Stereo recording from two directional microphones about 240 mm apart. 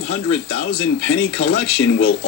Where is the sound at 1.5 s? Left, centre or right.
Left.